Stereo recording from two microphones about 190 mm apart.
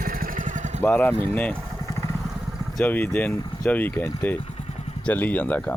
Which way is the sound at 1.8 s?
15° left (ahead or behind).